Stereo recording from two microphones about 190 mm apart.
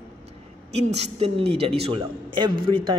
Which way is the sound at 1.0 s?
30° right (ahead or behind).